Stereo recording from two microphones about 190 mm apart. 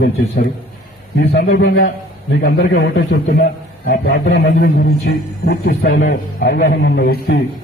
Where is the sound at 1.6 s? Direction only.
60° left (ahead or behind).